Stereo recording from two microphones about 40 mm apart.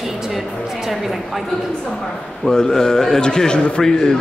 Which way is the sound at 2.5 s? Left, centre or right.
Centre.